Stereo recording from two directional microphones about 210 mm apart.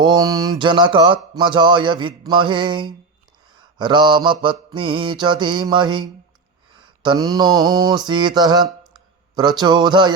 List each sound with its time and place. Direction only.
0.0 s speech: 20° right (ahead or behind)